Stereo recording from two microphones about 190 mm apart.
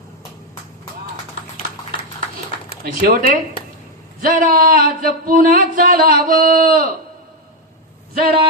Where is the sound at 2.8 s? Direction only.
50° right (ahead or behind).